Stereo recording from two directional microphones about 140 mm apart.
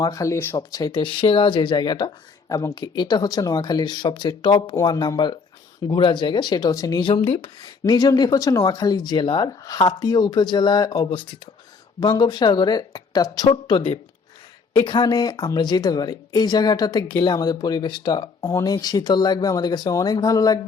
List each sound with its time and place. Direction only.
0.0 s speech: 25° left (ahead or behind)
0.7 s speech: 30° left (ahead or behind)
13.5 s speech: 40° left (ahead or behind)